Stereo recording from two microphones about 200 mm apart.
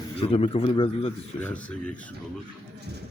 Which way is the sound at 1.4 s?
5° left (ahead or behind).